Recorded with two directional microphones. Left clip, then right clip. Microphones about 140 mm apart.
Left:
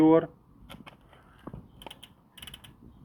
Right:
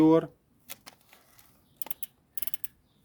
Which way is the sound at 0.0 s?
30° right (ahead or behind).